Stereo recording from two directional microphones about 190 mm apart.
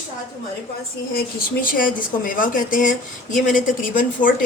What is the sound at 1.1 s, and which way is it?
Speech, 50° left (ahead or behind).